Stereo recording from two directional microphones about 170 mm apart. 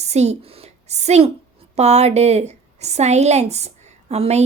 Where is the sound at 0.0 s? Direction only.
40° right (ahead or behind).